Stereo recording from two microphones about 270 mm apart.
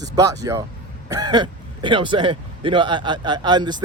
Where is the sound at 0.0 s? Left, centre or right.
Centre.